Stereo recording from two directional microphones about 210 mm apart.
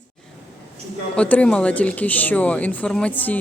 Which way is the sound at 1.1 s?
5° left (ahead or behind).